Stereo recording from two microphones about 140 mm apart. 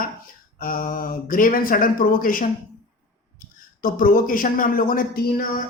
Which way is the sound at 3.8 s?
90° left.